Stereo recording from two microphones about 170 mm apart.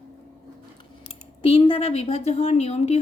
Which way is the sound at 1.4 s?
30° left (ahead or behind).